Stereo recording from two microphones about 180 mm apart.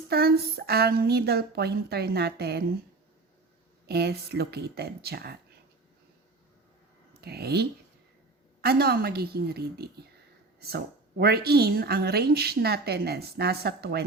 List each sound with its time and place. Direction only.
0.1 s speech: 60° right (ahead or behind)
3.8 s speech: 60° right (ahead or behind)
7.2 s speech: 60° right (ahead or behind)